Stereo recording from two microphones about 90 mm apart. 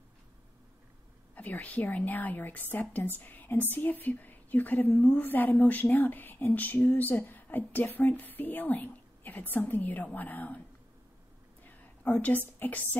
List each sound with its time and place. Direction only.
1.3 s a woman's voice: 15° left (ahead or behind)
11.6 s whispering: 20° left (ahead or behind)